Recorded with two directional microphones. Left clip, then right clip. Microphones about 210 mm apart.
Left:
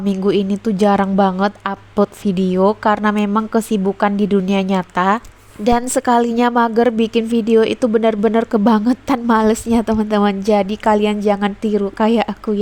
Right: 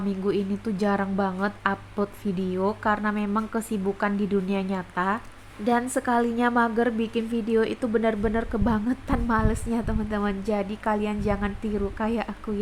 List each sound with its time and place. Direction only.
0.0 s a woman's voice: 40° left (ahead or behind)